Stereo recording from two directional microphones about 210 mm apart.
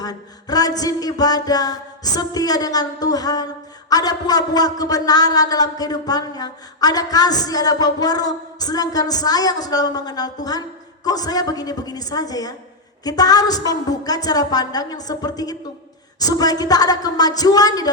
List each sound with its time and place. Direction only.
0.0 s a man's voice: 20° left (ahead or behind)